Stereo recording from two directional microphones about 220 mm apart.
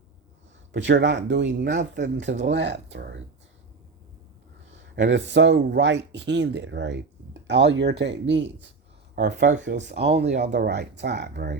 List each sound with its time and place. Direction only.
0.7 s speech: 55° right (ahead or behind)
4.7 s speech: 55° right (ahead or behind)